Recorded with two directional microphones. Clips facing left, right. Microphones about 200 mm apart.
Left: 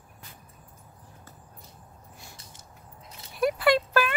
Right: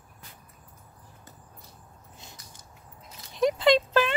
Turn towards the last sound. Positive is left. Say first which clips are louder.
# right 2 dB
turn(degrees=-20)  # may be behind; listen again after turning